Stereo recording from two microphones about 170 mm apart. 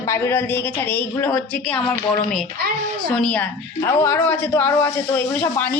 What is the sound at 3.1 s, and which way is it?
A woman's voice, 5° left (ahead or behind).